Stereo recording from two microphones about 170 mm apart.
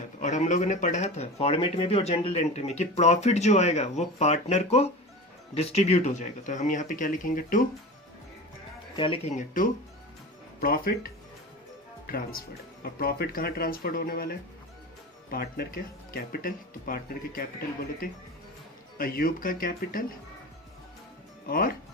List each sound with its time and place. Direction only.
0.2 s speech: 45° left (ahead or behind)
9.0 s speech: 30° left (ahead or behind)
10.6 s speech: 60° left (ahead or behind)
21.4 s speech: 60° left (ahead or behind)